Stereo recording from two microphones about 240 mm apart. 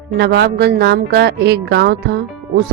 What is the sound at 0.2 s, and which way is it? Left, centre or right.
Speech, right.